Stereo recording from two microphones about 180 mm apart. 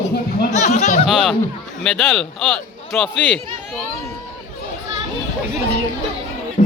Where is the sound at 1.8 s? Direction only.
Centre (ahead or behind).